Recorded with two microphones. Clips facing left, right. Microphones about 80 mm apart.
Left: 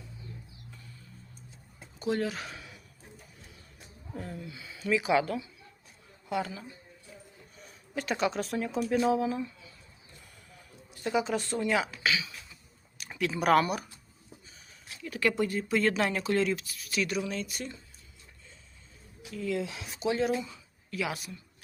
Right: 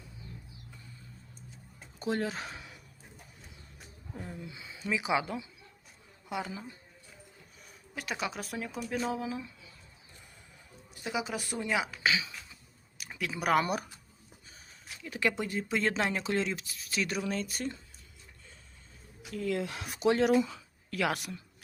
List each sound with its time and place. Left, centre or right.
2.0 s speech: right
4.2 s speech: centre
7.6 s speech: centre
11.0 s speech: centre
12.0 s speech: right
13.0 s speech: centre
15.0 s speech: right
19.3 s a woman's voice: right